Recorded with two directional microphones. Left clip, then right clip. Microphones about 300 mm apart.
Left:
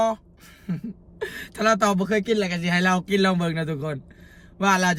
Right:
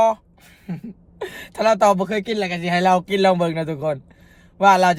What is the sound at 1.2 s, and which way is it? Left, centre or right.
A man's voice, centre.